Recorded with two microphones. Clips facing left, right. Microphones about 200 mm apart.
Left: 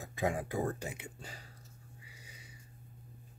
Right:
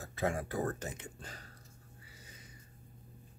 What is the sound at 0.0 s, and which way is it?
Speech, 15° left (ahead or behind).